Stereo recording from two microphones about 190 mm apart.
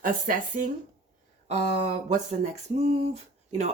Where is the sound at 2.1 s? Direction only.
35° right (ahead or behind).